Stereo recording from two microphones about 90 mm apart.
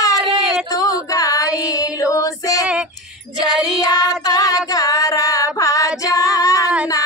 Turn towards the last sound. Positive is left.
turn(degrees=40)  # may be behind; listen again after turning